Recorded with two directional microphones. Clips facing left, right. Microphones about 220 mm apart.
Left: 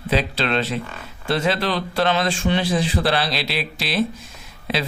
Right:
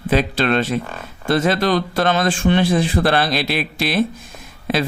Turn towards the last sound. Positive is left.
turn(degrees=-50)  # may be behind; listen again after turning